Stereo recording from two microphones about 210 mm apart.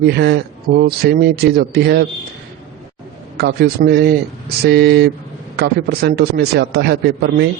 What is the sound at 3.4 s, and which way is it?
A man's voice, 50° right (ahead or behind).